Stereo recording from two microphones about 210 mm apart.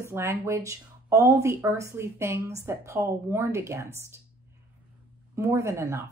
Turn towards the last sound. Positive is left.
turn(degrees=-15)  # may be behind; listen again after turning